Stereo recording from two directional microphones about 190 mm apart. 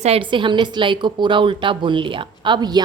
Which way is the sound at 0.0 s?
30° right (ahead or behind).